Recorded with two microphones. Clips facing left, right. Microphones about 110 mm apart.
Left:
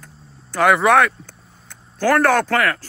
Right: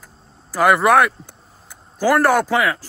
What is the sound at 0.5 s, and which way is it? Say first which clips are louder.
Speech: even; 5° right (ahead or behind).